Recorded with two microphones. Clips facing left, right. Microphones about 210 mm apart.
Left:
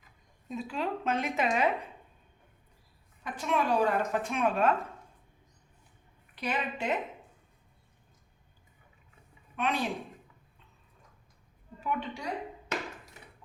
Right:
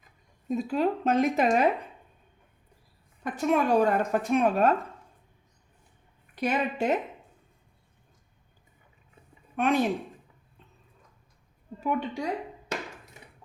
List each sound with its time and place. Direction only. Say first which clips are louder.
0.4 s a woman's voice: right 8 dB; 45° right (ahead or behind)
3.4 s a woman's voice: right 5 dB; 45° right (ahead or behind)
6.3 s a woman's voice: right 6 dB; 45° right (ahead or behind)
9.6 s a woman's voice: right 7 dB; 45° right (ahead or behind)
11.8 s a woman's voice: right 5 dB; 40° right (ahead or behind)